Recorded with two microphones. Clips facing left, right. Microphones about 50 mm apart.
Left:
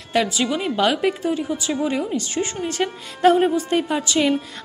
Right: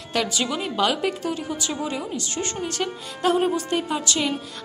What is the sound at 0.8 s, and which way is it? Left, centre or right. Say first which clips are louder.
Speech: left 2 dB; left.